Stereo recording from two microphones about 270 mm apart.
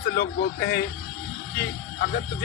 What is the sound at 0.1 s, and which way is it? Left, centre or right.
Speech, left.